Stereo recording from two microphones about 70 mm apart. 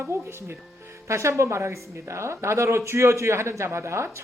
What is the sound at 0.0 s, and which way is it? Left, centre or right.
A woman's voice, right.